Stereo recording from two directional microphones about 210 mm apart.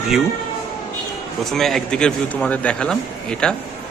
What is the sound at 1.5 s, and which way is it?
A man's voice, centre (ahead or behind).